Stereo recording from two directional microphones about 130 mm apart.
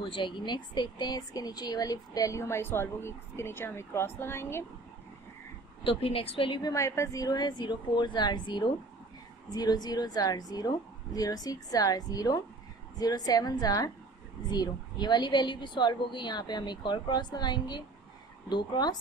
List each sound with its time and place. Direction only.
0.0 s speech: 40° left (ahead or behind); by 4.6 s 20° left (ahead or behind)
5.9 s speech: 45° left (ahead or behind)
6.6 s a woman's voice: 25° left (ahead or behind)